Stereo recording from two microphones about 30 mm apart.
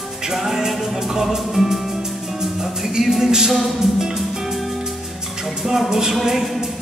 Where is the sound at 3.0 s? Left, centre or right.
Centre.